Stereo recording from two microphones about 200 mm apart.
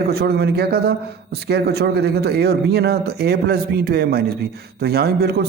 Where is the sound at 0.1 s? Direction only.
50° right (ahead or behind).